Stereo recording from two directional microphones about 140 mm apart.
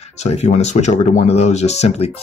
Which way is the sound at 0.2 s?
50° left (ahead or behind).